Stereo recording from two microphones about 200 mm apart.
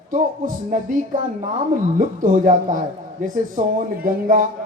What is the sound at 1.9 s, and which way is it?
Speech, 40° right (ahead or behind).